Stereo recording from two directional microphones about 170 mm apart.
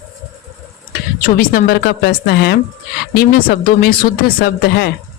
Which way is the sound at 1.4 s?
60° left (ahead or behind).